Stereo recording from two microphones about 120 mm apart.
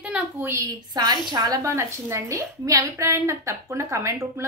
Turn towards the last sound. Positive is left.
turn(degrees=-25)  # may be behind; listen again after turning